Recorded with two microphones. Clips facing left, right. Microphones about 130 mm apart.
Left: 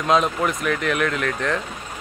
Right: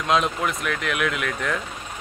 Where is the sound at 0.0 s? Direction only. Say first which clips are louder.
Left 3 dB; centre (ahead or behind).